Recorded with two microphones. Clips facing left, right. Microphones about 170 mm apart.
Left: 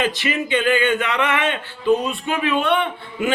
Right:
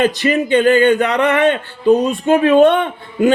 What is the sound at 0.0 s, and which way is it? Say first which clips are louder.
A man's voice: right 7 dB; 45° right (ahead or behind).